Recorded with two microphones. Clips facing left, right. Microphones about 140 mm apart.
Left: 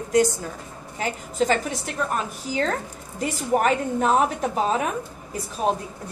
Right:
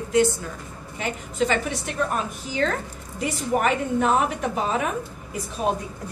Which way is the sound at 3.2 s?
40° left (ahead or behind).